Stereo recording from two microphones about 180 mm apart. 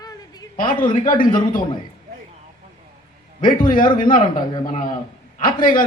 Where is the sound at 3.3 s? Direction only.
50° left (ahead or behind).